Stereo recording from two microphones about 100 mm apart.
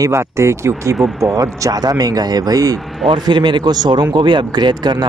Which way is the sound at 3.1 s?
50° right (ahead or behind).